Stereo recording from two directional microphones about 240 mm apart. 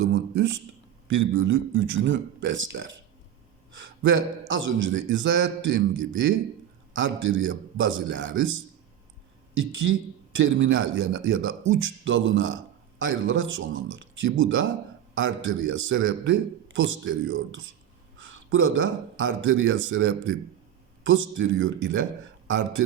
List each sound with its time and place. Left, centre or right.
1.0 s a man's voice: right
10.3 s a man's voice: right